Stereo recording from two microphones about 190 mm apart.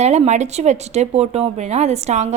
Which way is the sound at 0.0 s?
35° right (ahead or behind).